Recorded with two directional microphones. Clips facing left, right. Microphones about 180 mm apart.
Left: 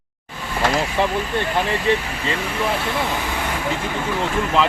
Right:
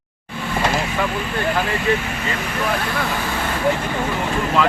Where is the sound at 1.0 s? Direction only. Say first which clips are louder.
Left 4 dB; 30° left (ahead or behind).